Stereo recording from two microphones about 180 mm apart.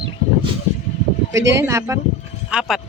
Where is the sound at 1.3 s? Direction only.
15° right (ahead or behind).